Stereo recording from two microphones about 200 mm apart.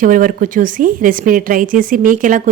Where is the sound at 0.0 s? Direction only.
40° right (ahead or behind).